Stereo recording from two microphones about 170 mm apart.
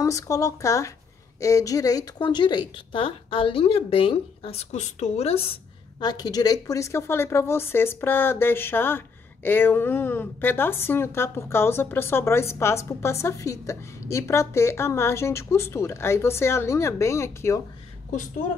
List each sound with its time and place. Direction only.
0.0 s a woman's voice: 20° left (ahead or behind)